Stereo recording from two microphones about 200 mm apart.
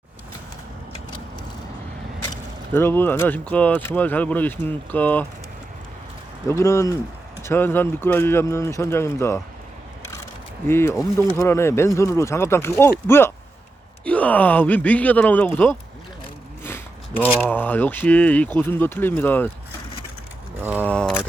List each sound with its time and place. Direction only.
2.7 s speech: 10° left (ahead or behind)
6.5 s speech: 15° left (ahead or behind)
10.7 s speech: 10° left (ahead or behind)
16.6 s a sound: 10° left (ahead or behind)
17.4 s speech: 10° left (ahead or behind)
20.6 s speech: 10° right (ahead or behind)
20.8 s a sound: 5° left (ahead or behind)